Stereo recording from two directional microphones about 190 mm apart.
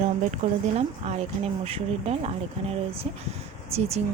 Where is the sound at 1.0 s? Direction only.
35° right (ahead or behind).